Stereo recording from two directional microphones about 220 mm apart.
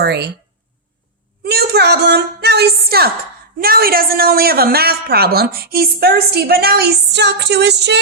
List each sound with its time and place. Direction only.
0.0 s speech: 50° right (ahead or behind)
1.5 s a woman's voice: 45° right (ahead or behind)